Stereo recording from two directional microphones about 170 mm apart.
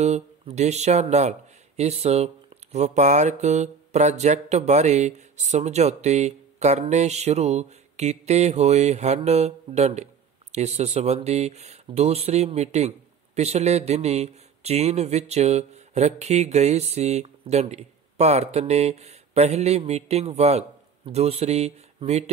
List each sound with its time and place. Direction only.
0.0 s a man's voice: 40° right (ahead or behind)